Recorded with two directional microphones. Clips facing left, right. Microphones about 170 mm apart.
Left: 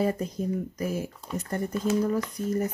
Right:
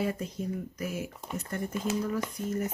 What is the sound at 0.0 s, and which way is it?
Speech, 40° left (ahead or behind).